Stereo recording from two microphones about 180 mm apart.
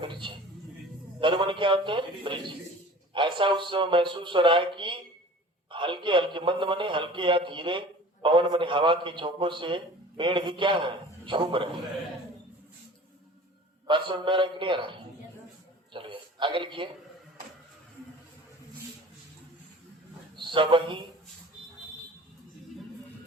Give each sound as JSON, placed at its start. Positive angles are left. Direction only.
{"t": 0.0, "sound": "music", "side_deg": -25}
{"t": 1.2, "sound": "a man's voice", "side_deg": -25}
{"t": 13.8, "sound": "a man's voice", "side_deg": -25}
{"t": 20.3, "sound": "a man's voice", "side_deg": -25}